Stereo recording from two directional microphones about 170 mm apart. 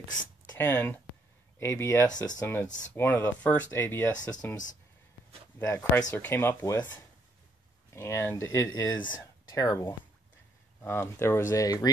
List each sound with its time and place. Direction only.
0.6 s speech: 10° left (ahead or behind)
2.0 s speech: 25° left (ahead or behind)
2.4 s speech: 10° left (ahead or behind)
5.7 s speech: 10° left (ahead or behind)
7.9 s speech: 15° left (ahead or behind)